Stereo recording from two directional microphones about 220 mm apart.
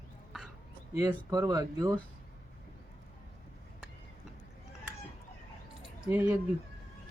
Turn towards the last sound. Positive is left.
turn(degrees=-10)  # may be behind; listen again after turning